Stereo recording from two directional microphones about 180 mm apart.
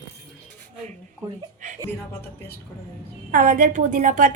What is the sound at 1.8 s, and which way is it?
Speech, 15° left (ahead or behind).